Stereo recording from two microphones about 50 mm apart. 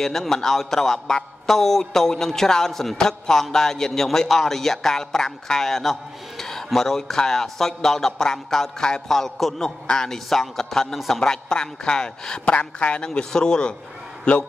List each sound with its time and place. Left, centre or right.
0.0 s a man's voice: centre